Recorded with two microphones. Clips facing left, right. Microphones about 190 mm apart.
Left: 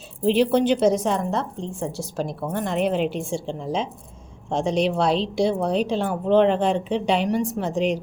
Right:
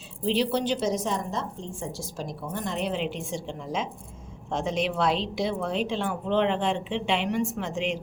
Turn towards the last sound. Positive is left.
turn(degrees=40)  # may be behind; listen again after turning